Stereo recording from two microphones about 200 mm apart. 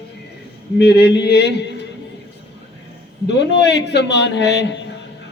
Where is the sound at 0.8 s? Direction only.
55° left (ahead or behind).